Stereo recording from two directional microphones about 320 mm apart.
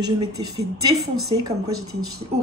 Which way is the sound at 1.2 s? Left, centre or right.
Centre.